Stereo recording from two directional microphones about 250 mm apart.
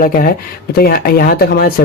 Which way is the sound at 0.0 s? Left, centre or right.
Left.